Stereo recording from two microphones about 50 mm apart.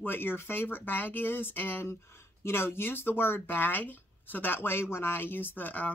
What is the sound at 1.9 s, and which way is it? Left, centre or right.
Speech, left.